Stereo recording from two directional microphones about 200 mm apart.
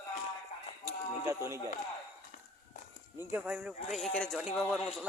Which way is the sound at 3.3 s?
5° right (ahead or behind).